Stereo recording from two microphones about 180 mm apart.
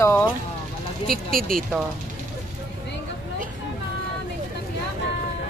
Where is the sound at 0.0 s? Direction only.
15° left (ahead or behind).